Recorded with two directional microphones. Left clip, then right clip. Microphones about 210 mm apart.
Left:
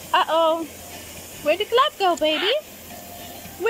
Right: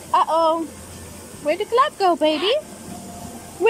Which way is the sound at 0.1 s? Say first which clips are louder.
Right 1 dB; centre (ahead or behind).